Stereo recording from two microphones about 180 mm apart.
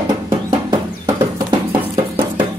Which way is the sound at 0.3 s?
25° right (ahead or behind).